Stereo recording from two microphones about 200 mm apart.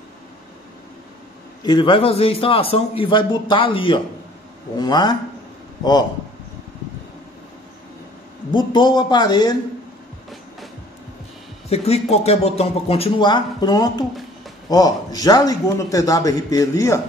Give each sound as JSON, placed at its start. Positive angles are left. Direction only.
{"t": 1.6, "sound": "a man's voice", "side_deg": 20}
{"t": 8.5, "sound": "a man's voice", "side_deg": 25}
{"t": 11.7, "sound": "a man's voice", "side_deg": 30}